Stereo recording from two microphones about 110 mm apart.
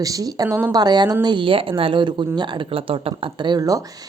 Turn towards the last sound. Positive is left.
turn(degrees=-30)  # may be behind; listen again after turning